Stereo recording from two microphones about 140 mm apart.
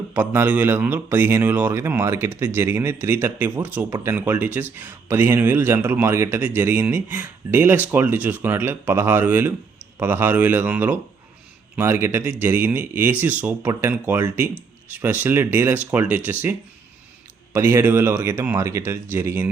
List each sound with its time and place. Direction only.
0.1 s speech: 10° right (ahead or behind)